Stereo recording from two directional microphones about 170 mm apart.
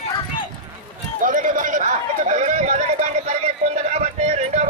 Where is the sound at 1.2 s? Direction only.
50° right (ahead or behind).